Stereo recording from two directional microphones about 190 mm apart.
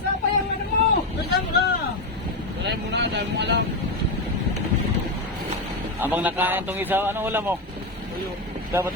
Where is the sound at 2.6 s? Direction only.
65° right (ahead or behind).